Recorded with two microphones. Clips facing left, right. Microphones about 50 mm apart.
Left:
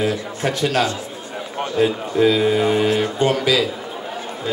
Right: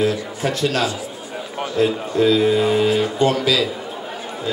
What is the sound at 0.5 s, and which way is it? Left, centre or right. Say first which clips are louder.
A man's voice: left 1 dB; centre.